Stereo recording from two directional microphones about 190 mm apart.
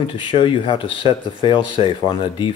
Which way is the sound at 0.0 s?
25° left (ahead or behind).